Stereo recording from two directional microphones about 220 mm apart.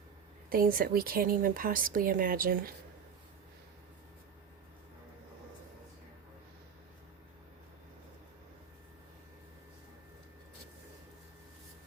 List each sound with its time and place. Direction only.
0.5 s speech: 40° right (ahead or behind)